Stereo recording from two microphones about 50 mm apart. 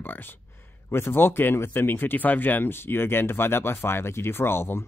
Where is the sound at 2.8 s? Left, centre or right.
Left.